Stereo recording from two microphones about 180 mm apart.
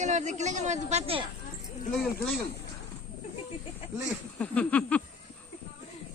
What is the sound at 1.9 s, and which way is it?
Speech, centre (ahead or behind).